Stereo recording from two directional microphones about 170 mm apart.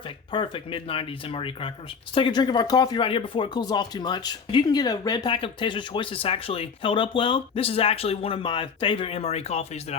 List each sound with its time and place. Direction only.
0.3 s speech: 30° left (ahead or behind)